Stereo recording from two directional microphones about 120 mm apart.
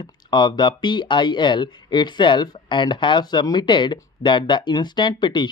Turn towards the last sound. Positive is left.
turn(degrees=40)  # may be behind; listen again after turning